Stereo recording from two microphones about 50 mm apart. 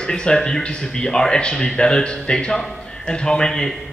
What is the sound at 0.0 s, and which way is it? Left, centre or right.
A man's voice, centre.